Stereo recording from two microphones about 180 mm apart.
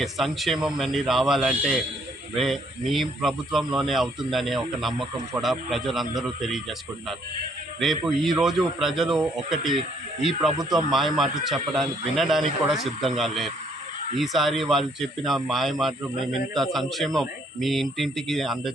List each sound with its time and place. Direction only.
0.0 s a man's voice: centre (ahead or behind)
10.6 s speech: 20° right (ahead or behind)
10.9 s a man's voice: centre (ahead or behind)